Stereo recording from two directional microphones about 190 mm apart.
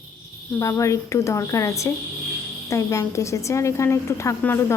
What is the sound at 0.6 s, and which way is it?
A woman's voice, 15° left (ahead or behind).